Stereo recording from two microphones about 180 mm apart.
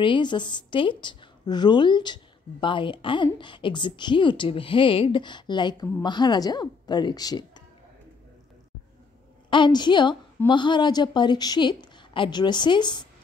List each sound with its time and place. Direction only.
0.0 s a woman's voice: 25° left (ahead or behind)
9.5 s a woman's voice: 25° left (ahead or behind)